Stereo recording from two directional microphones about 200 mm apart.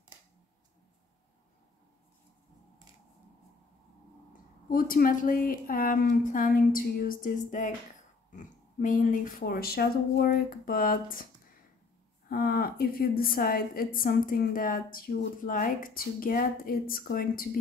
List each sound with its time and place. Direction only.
4.6 s a woman's voice: 45° left (ahead or behind)
12.3 s a woman's voice: 50° left (ahead or behind)